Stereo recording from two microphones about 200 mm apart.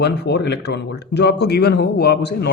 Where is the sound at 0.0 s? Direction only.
55° left (ahead or behind).